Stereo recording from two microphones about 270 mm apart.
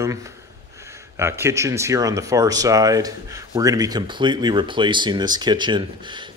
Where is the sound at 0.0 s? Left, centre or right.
Centre.